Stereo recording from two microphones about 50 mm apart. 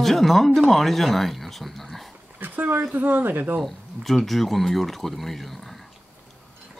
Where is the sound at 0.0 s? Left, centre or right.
Centre.